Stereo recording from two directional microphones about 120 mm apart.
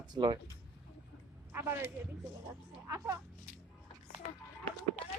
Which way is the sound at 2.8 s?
25° right (ahead or behind).